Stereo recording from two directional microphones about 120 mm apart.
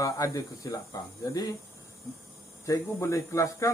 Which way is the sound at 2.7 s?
25° left (ahead or behind).